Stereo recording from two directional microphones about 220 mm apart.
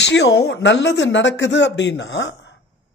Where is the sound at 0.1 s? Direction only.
50° left (ahead or behind).